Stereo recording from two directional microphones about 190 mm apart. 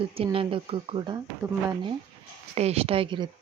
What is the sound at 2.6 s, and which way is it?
Speech, 30° right (ahead or behind).